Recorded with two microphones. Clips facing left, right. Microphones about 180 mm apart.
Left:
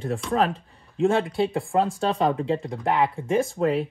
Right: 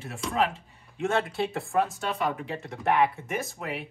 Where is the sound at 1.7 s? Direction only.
30° left (ahead or behind).